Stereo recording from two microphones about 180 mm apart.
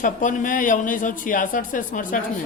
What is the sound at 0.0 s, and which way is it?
Speech, 45° left (ahead or behind).